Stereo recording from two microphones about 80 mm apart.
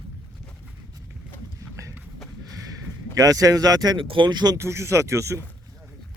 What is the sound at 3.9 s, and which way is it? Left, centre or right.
Speech, right.